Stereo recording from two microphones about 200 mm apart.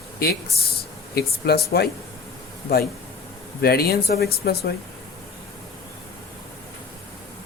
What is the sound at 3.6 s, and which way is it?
Speech, 50° left (ahead or behind).